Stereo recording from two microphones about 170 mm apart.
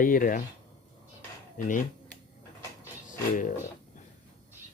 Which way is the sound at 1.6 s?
50° left (ahead or behind).